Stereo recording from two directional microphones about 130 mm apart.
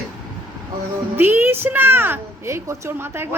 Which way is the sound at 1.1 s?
15° right (ahead or behind).